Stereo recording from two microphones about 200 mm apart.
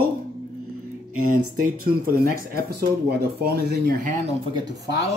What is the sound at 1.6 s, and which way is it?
Speech, 45° right (ahead or behind).